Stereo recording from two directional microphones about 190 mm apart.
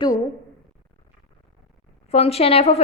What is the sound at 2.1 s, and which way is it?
Speech, 30° left (ahead or behind).